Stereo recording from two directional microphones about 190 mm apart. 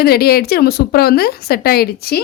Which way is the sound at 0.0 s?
55° left (ahead or behind).